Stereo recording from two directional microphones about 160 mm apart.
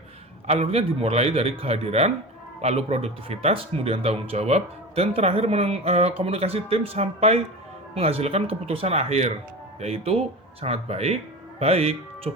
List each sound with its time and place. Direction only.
0.4 s speech: 40° right (ahead or behind)